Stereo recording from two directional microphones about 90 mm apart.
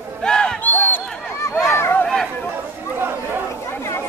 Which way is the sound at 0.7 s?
20° left (ahead or behind).